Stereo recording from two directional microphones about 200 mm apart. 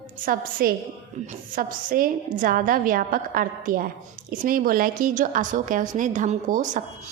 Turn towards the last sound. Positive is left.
turn(degrees=-40)  # may be behind; listen again after turning